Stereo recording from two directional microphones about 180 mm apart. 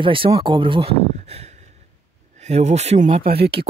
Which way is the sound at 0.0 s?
30° right (ahead or behind).